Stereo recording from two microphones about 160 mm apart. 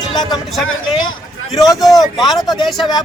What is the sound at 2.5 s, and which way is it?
Speech, centre (ahead or behind).